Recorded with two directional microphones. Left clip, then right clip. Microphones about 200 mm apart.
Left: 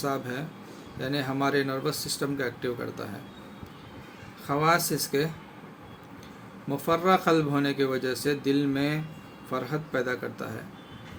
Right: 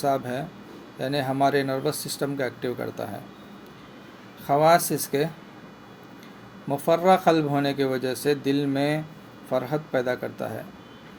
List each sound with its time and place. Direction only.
0.0 s speech: 15° right (ahead or behind)
4.4 s speech: 15° right (ahead or behind)
6.7 s speech: 15° right (ahead or behind)